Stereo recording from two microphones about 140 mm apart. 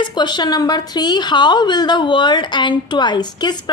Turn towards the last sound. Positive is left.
turn(degrees=30)  # may be behind; listen again after turning